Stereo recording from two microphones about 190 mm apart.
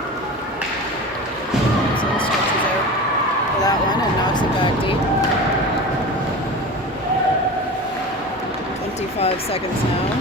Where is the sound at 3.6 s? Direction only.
20° left (ahead or behind).